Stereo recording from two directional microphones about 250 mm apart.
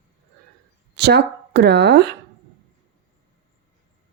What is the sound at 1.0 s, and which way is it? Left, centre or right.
Speech, right.